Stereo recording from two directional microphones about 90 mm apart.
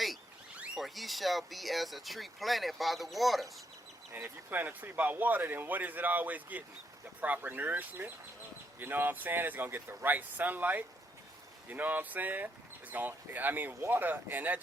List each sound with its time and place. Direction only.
0.8 s speech: centre (ahead or behind)
4.1 s speech: 20° right (ahead or behind)